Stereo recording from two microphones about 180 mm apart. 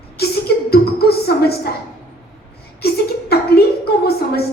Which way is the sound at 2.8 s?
60° left (ahead or behind).